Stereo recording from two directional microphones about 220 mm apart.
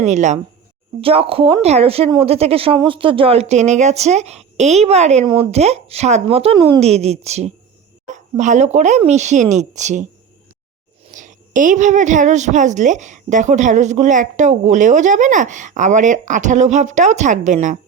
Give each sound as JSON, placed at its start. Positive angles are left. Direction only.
{"t": 0.0, "sound": "a woman's voice", "side_deg": -30}
{"t": 11.1, "sound": "a woman's voice", "side_deg": -35}